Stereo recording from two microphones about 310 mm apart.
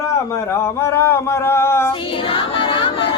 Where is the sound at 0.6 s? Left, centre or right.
Centre.